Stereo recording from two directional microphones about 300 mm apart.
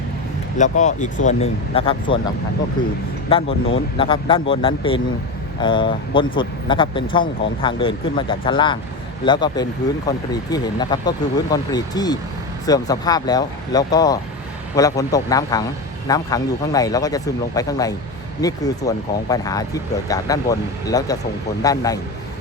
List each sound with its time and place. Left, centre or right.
0.6 s speech: left
3.2 s speech: centre